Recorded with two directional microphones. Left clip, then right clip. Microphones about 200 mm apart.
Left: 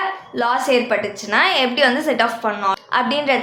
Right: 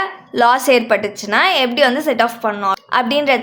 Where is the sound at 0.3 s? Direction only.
40° right (ahead or behind).